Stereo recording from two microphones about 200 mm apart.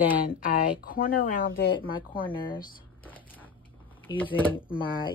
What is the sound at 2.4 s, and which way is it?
Speech, 45° left (ahead or behind).